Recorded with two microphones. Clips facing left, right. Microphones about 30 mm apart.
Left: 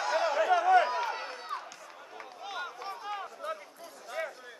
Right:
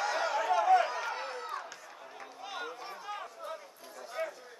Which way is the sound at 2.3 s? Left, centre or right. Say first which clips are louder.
Left 2 dB; centre.